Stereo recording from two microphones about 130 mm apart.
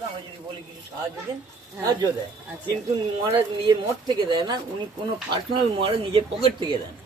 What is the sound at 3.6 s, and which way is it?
A woman's voice, 35° right (ahead or behind).